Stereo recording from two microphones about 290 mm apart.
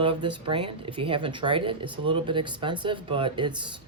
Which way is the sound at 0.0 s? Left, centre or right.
Centre.